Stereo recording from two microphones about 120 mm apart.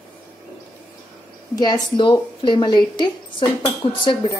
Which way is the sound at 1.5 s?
35° left (ahead or behind).